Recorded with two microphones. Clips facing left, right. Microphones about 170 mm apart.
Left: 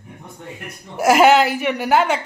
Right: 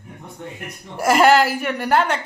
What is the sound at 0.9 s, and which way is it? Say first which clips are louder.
A woman's voice: left 2 dB; 5° left (ahead or behind).